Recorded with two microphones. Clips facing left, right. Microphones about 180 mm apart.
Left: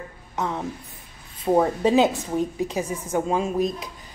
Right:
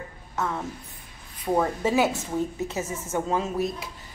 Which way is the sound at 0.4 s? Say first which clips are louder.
Left 2 dB; 20° left (ahead or behind).